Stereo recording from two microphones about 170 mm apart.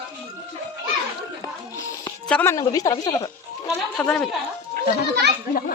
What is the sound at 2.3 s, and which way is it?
Music, 10° left (ahead or behind).